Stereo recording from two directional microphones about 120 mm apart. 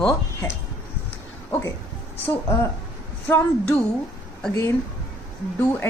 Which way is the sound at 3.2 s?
15° left (ahead or behind).